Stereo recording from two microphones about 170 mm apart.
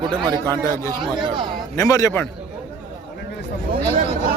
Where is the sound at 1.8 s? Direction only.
20° left (ahead or behind).